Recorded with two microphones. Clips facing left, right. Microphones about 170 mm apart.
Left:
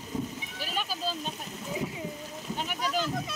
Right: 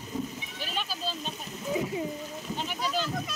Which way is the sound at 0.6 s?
10° left (ahead or behind).